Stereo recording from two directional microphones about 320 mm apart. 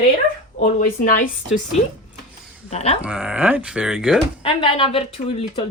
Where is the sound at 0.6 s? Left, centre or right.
Left.